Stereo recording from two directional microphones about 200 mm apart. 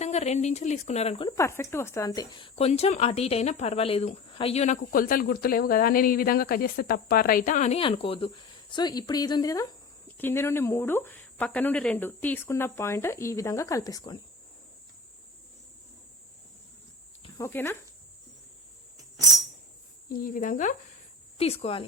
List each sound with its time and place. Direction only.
0.0 s a woman's voice: 35° left (ahead or behind)
1.4 s a woman's voice: 15° left (ahead or behind)
17.3 s speech: 10° left (ahead or behind)
20.1 s a woman's voice: 45° left (ahead or behind)
21.3 s speech: 30° left (ahead or behind)